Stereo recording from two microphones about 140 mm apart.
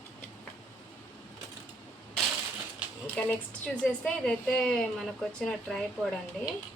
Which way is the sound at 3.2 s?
10° left (ahead or behind).